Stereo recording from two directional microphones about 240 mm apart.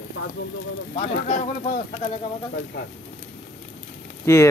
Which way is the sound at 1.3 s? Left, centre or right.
Left.